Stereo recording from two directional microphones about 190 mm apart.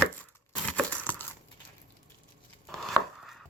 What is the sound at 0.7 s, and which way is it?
Crushing, 5° left (ahead or behind).